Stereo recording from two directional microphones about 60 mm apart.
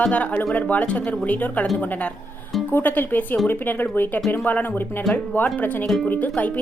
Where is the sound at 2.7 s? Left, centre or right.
Left.